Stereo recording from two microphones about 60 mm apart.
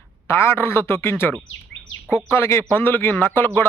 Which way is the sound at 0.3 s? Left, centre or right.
Left.